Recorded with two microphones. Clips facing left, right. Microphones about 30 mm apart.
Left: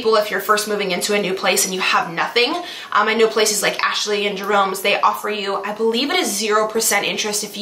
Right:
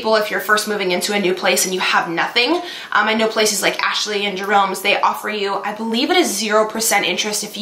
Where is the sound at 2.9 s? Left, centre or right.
Centre.